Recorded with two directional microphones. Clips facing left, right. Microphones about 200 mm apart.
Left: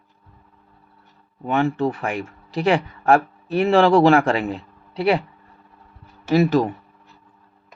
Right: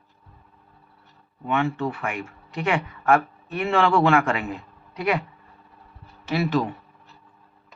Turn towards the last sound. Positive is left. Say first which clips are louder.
# left 6 dB
turn(degrees=45)  # may be behind; listen again after turning